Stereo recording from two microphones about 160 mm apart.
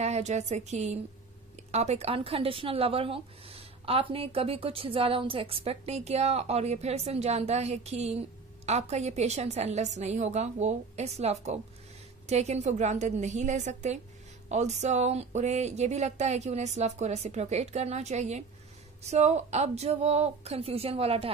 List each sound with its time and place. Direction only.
0.0 s a woman's voice: 45° right (ahead or behind)